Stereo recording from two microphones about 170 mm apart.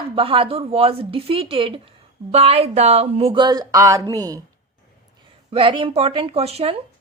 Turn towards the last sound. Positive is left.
turn(degrees=-35)  # may be behind; listen again after turning